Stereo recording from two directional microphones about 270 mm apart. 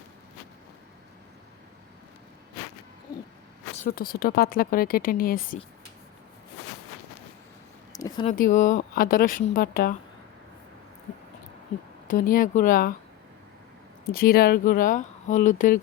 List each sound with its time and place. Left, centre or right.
3.8 s speech: left
7.9 s a sound: centre
8.3 s speech: left
12.0 s speech: left
14.1 s speech: left